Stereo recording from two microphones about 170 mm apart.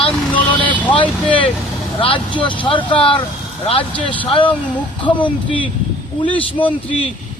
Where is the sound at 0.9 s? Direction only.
30° left (ahead or behind).